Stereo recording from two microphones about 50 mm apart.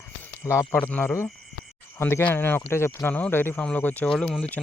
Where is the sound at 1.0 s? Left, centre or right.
Left.